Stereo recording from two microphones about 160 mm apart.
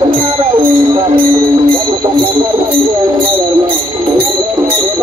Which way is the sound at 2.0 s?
30° right (ahead or behind).